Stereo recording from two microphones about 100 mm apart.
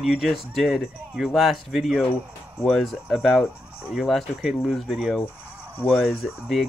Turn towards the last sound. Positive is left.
turn(degrees=-5)  # may be behind; listen again after turning